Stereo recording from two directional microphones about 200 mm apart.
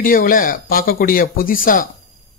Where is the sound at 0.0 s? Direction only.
45° left (ahead or behind).